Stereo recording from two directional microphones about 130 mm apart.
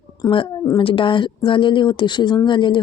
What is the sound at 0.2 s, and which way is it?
Speech, 35° left (ahead or behind).